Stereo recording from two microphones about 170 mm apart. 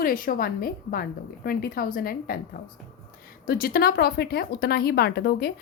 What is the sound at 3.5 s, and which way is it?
Speech, 60° left (ahead or behind).